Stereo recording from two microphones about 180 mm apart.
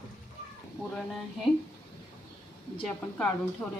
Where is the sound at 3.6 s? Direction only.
5° left (ahead or behind).